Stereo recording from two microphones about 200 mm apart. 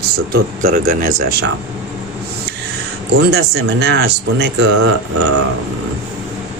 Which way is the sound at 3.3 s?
55° right (ahead or behind).